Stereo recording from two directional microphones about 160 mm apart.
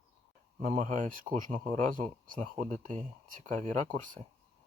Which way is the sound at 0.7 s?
55° right (ahead or behind).